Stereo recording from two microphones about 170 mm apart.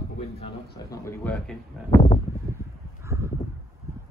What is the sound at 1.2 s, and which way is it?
Speech, 5° left (ahead or behind).